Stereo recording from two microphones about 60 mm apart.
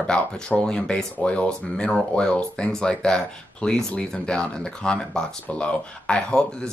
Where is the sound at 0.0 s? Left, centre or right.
Centre.